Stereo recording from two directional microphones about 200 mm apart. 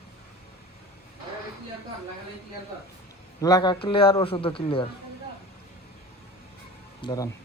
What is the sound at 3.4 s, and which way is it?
A man's voice, 20° left (ahead or behind).